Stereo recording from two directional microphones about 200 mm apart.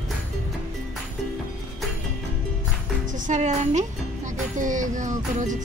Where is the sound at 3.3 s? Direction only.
35° right (ahead or behind).